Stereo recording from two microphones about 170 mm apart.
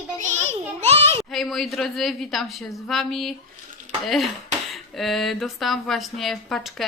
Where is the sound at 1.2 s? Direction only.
Centre (ahead or behind).